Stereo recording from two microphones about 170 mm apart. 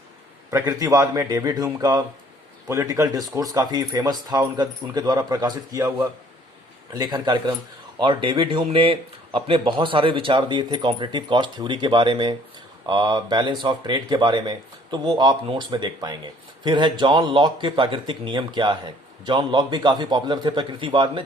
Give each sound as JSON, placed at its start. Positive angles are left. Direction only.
{"t": 0.5, "sound": "speech", "side_deg": -20}